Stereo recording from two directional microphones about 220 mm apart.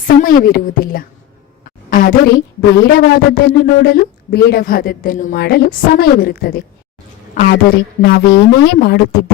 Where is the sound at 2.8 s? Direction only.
40° left (ahead or behind).